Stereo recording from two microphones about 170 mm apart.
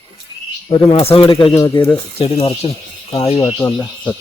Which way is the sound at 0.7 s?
30° left (ahead or behind).